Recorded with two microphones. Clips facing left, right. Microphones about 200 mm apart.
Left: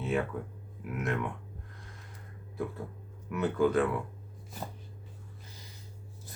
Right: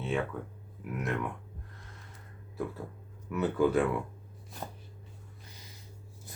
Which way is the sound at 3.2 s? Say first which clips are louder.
Even; 5° right (ahead or behind).